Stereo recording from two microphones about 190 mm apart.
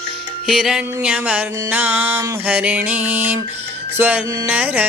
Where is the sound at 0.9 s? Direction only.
10° right (ahead or behind).